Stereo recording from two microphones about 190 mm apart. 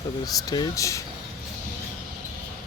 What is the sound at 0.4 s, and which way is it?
Speech, 20° left (ahead or behind).